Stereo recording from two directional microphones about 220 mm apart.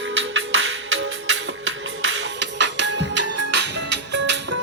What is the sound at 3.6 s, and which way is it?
Music, 55° right (ahead or behind).